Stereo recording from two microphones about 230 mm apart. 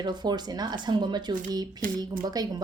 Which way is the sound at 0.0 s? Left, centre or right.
Centre.